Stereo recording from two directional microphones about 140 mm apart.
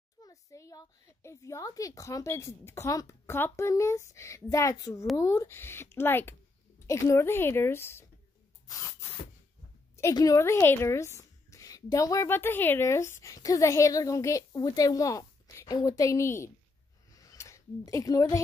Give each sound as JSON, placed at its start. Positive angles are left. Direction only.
{"t": 0.2, "sound": "speech", "side_deg": 25}
{"t": 8.6, "sound": "spray", "side_deg": 25}
{"t": 9.9, "sound": "speech", "side_deg": 20}
{"t": 17.1, "sound": "a sound", "side_deg": 25}